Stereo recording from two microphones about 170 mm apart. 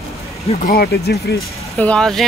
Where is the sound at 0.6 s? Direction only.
65° left (ahead or behind).